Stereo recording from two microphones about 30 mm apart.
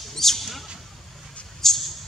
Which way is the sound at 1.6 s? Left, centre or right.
Centre.